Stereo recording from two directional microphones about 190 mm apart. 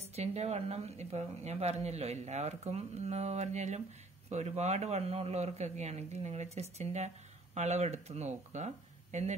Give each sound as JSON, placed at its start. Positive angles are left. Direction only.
{"t": 0.0, "sound": "speech", "side_deg": -35}